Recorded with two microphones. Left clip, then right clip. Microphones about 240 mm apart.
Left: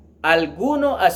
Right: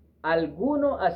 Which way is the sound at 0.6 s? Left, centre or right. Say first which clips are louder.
Left 7 dB; left.